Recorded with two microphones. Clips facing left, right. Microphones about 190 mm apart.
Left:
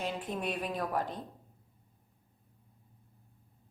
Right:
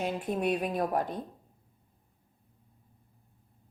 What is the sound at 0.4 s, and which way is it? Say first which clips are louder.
Speech: right 7 dB; 45° right (ahead or behind).